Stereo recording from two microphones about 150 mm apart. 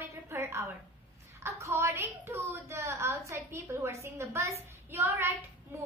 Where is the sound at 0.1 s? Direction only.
20° right (ahead or behind).